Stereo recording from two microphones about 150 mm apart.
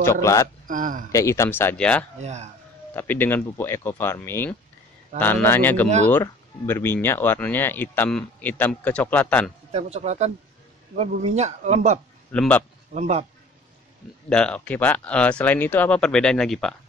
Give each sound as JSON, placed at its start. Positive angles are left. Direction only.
{"t": 0.0, "sound": "speech", "side_deg": 20}
{"t": 0.7, "sound": "speech", "side_deg": -65}
{"t": 1.1, "sound": "speech", "side_deg": 20}
{"t": 2.1, "sound": "a man's voice", "side_deg": -50}
{"t": 2.9, "sound": "speech", "side_deg": 15}
{"t": 9.7, "sound": "a man's voice", "side_deg": -45}
{"t": 12.3, "sound": "speech", "side_deg": 10}
{"t": 12.9, "sound": "a man's voice", "side_deg": -45}
{"t": 14.3, "sound": "speech", "side_deg": 5}